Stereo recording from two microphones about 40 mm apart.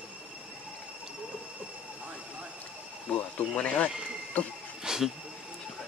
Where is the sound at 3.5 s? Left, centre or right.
Left.